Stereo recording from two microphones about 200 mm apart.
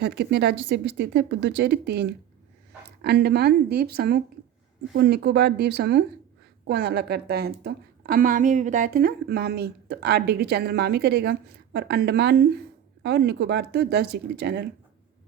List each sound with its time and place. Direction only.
0.2 s a woman's voice: 55° right (ahead or behind)